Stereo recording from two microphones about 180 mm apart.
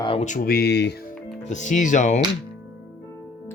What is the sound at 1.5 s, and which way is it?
Speech, 40° left (ahead or behind).